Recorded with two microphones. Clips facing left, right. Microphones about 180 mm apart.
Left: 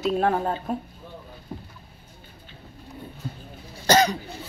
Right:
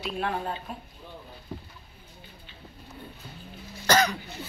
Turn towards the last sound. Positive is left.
turn(degrees=25)  # may be behind; listen again after turning